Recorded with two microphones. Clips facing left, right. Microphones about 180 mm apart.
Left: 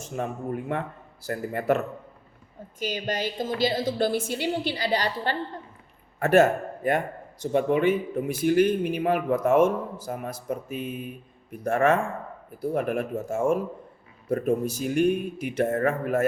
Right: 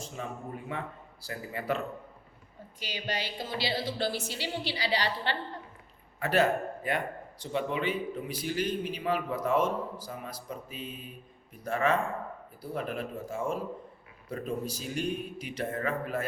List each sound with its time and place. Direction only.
0.1 s a man's voice: 55° left (ahead or behind)